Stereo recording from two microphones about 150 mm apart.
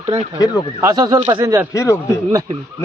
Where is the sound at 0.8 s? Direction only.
20° right (ahead or behind).